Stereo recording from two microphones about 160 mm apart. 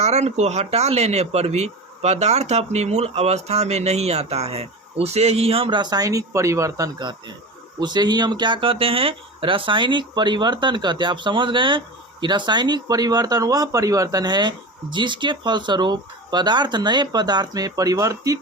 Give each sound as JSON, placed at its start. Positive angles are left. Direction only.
{"t": 0.0, "sound": "speech", "side_deg": -45}